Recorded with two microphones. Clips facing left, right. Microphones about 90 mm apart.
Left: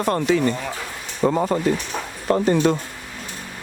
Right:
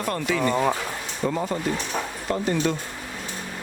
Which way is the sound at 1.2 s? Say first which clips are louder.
Left 7 dB; 45° left (ahead or behind).